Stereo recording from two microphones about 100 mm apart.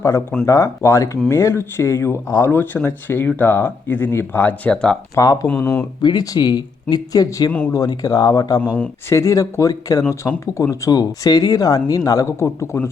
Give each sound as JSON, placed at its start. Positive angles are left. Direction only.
{"t": 0.0, "sound": "speech", "side_deg": 30}
{"t": 5.1, "sound": "speech", "side_deg": 40}
{"t": 5.5, "sound": "speech", "side_deg": 25}
{"t": 6.0, "sound": "speech", "side_deg": 45}
{"t": 8.6, "sound": "speech", "side_deg": 15}
{"t": 9.0, "sound": "speech", "side_deg": 30}